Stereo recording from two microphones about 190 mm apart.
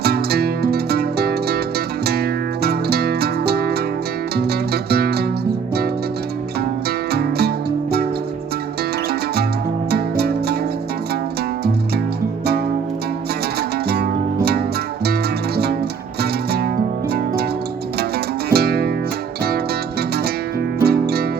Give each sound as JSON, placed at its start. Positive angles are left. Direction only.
{"t": 0.0, "sound": "music", "side_deg": -55}
{"t": 6.6, "sound": "music", "side_deg": -55}
{"t": 9.0, "sound": "music", "side_deg": -55}
{"t": 13.6, "sound": "music", "side_deg": -55}
{"t": 18.5, "sound": "music", "side_deg": -55}